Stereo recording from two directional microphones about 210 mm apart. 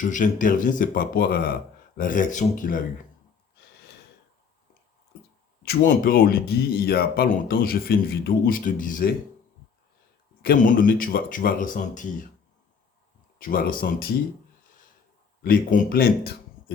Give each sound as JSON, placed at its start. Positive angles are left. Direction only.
{"t": 0.0, "sound": "speech", "side_deg": 40}
{"t": 5.6, "sound": "speech", "side_deg": 45}
{"t": 10.4, "sound": "speech", "side_deg": 40}
{"t": 13.4, "sound": "speech", "side_deg": 45}
{"t": 15.4, "sound": "speech", "side_deg": 40}